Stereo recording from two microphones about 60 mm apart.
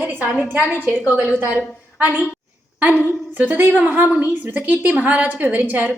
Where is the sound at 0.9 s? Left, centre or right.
Right.